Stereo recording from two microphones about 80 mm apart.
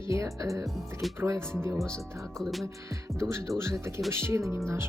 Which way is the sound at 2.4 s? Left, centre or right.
Centre.